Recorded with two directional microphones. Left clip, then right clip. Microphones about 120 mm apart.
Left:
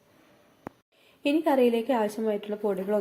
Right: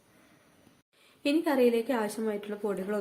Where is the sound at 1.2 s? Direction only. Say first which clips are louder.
Left 3 dB; 15° left (ahead or behind).